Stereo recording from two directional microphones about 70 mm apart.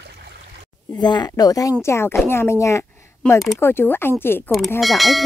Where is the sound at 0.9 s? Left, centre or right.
Left.